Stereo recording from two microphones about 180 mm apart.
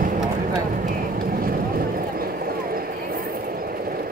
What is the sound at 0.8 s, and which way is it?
Vehicle, 50° right (ahead or behind).